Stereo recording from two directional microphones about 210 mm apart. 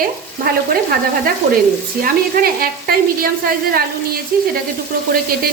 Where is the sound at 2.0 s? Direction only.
45° right (ahead or behind).